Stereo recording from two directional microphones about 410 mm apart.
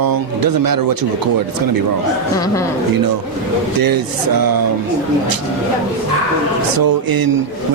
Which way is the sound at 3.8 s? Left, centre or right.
Right.